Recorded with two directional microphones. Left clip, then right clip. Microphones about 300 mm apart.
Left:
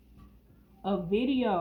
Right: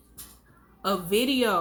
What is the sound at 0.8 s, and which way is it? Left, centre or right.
Speech, right.